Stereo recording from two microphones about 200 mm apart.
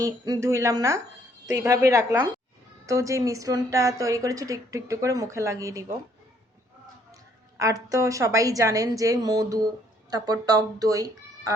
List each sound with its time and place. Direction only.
0.0 s a woman's voice: 15° right (ahead or behind)
7.6 s a woman's voice: 15° right (ahead or behind)